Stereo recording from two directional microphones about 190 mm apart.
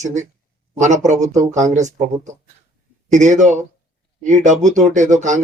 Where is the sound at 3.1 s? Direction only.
40° right (ahead or behind).